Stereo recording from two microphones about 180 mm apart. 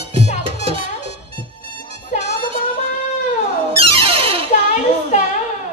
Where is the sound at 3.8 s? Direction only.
30° right (ahead or behind).